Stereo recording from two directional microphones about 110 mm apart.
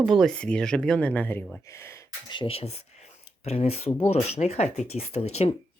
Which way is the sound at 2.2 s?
50° left (ahead or behind).